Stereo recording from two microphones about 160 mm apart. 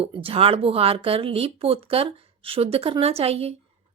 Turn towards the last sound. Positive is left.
turn(degrees=-40)  # may be behind; listen again after turning